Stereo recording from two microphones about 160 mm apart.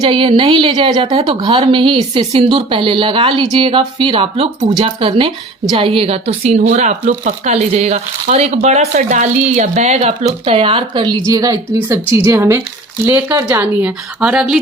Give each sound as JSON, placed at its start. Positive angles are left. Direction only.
{"t": 0.0, "sound": "a woman's voice", "side_deg": -35}